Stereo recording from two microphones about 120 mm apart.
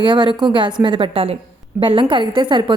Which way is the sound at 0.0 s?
40° right (ahead or behind).